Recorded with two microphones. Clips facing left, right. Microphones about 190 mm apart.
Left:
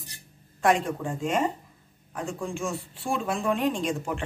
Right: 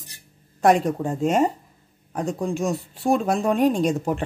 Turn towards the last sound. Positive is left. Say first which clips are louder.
# right 6 dB
turn(degrees=-40)  # may be behind; listen again after turning